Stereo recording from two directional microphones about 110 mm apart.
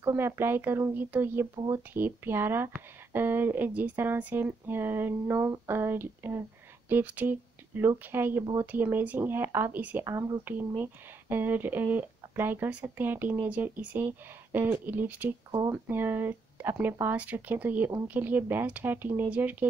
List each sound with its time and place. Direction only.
0.0 s speech: 20° right (ahead or behind)
1.5 s speech: 35° right (ahead or behind)
2.0 s speech: 20° right (ahead or behind)
10.0 s speech: 25° right (ahead or behind)